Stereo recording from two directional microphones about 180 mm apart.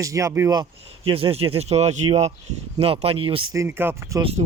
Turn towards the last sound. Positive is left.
turn(degrees=-35)  # may be behind; listen again after turning